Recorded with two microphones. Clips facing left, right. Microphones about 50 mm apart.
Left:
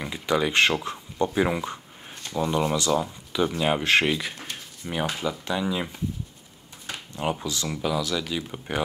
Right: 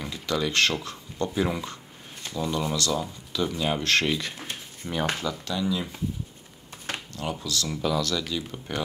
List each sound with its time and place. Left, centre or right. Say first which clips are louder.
0.0 s speech: left 3 dB; left
7.2 s speech: left 4 dB; left